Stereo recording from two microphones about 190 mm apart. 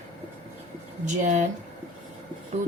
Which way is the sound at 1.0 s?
40° right (ahead or behind).